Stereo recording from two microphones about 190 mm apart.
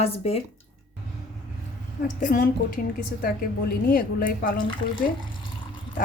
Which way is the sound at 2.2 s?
45° left (ahead or behind).